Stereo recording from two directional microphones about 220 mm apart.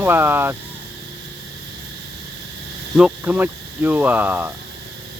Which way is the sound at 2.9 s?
5° right (ahead or behind).